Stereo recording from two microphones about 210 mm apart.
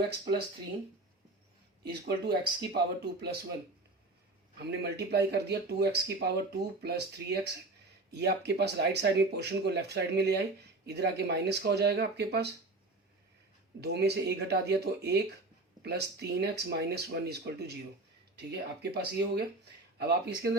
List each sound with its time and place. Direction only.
0.1 s speech: 50° right (ahead or behind)
1.8 s speech: 50° right (ahead or behind)
4.5 s speech: 50° right (ahead or behind)
13.8 s speech: 50° right (ahead or behind)